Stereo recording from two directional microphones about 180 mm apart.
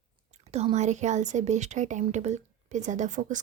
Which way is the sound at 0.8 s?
40° right (ahead or behind).